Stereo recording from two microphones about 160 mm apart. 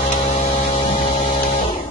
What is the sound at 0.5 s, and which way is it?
Music, 35° left (ahead or behind).